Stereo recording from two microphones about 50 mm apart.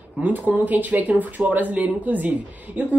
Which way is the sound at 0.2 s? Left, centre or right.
Right.